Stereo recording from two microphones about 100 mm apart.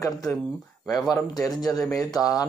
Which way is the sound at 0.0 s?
30° left (ahead or behind).